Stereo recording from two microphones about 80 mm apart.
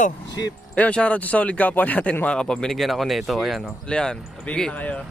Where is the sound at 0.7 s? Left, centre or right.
Centre.